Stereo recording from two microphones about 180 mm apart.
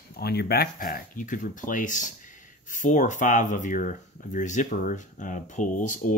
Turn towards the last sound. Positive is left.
turn(degrees=45)  # may be behind; listen again after turning